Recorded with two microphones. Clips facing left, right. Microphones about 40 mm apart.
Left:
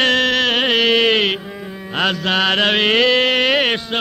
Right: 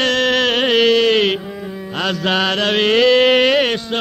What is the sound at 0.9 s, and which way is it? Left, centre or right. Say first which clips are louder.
Mantra: right 1 dB; left.